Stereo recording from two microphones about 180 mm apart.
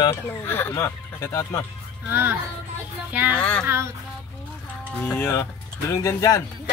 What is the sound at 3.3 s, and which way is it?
Speech, 5° left (ahead or behind).